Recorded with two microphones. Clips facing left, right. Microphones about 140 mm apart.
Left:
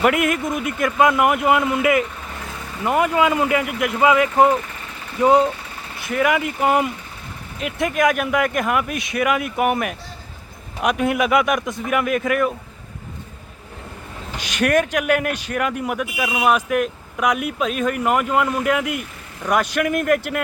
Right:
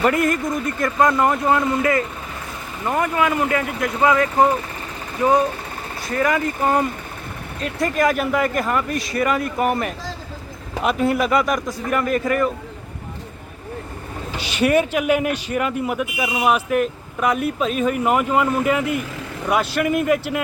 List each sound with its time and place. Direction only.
0.0 s a man's voice: 5° left (ahead or behind)
6.1 s a man's voice: 5° left (ahead or behind)
7.8 s speech: centre (ahead or behind)
14.6 s speech: 10° right (ahead or behind)